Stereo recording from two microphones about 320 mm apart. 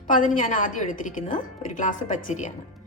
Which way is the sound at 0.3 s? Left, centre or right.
Left.